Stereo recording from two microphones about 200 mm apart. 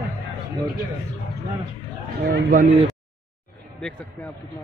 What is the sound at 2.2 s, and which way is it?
Speech, 50° right (ahead or behind).